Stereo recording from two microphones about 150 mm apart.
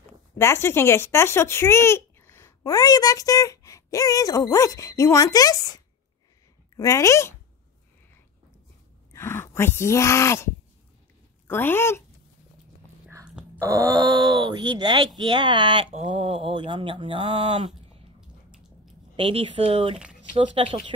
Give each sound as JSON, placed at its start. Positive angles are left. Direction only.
{"t": 0.4, "sound": "speech", "side_deg": 15}
{"t": 6.8, "sound": "speech", "side_deg": 20}
{"t": 9.1, "sound": "speech", "side_deg": 15}
{"t": 13.7, "sound": "speech", "side_deg": -20}
{"t": 19.1, "sound": "speech", "side_deg": -35}